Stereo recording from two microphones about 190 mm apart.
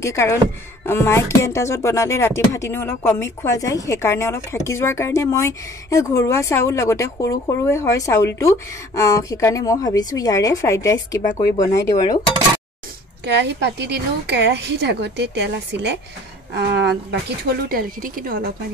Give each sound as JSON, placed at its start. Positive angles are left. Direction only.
{"t": 0.0, "sound": "speech", "side_deg": 15}
{"t": 13.2, "sound": "a woman's voice", "side_deg": -65}
{"t": 17.6, "sound": "speech", "side_deg": -50}